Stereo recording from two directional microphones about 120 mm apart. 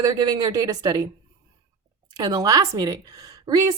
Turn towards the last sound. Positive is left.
turn(degrees=-30)  # may be behind; listen again after turning